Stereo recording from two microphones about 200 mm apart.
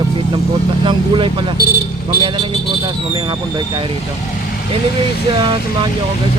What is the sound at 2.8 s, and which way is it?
Speech, 25° right (ahead or behind).